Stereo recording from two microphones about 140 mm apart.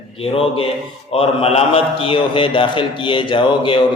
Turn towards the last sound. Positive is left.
turn(degrees=35)  # may be behind; listen again after turning